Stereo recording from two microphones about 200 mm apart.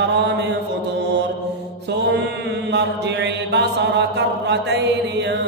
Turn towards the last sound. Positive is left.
turn(degrees=-60)  # may be behind; listen again after turning